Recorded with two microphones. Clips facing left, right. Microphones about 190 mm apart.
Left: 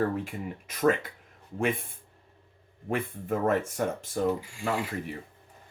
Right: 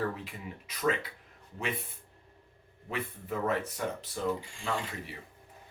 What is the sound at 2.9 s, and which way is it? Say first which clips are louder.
Speech: left 6 dB; 50° left (ahead or behind).